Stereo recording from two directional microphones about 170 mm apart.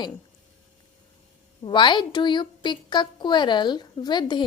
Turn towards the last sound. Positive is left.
turn(degrees=25)  # may be behind; listen again after turning